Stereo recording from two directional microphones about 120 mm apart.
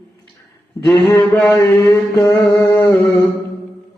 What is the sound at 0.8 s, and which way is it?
Music, 25° left (ahead or behind).